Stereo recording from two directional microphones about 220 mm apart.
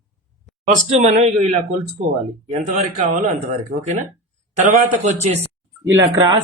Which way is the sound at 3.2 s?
35° right (ahead or behind).